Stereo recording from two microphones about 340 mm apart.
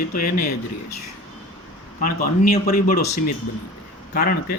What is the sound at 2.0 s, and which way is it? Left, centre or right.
Speech, left.